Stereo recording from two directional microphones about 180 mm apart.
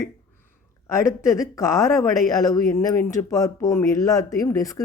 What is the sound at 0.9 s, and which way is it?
Speech, 15° left (ahead or behind).